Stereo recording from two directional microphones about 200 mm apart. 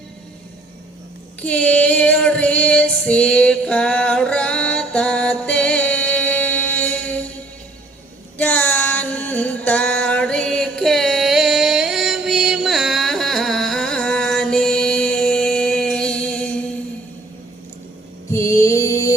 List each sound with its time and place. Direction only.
1.4 s female singing: 5° left (ahead or behind)
8.4 s a sound: 10° left (ahead or behind)
18.3 s music: 15° left (ahead or behind)